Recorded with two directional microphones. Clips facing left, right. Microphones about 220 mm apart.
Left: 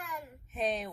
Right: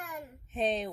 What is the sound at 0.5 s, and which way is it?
Speech, 30° right (ahead or behind).